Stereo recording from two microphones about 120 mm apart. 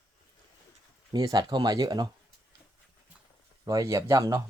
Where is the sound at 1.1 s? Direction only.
35° right (ahead or behind).